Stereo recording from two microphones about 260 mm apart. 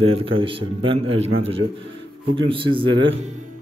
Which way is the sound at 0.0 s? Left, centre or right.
Right.